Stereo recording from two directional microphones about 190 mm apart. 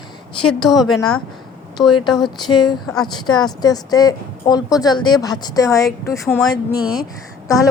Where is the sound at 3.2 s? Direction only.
20° left (ahead or behind).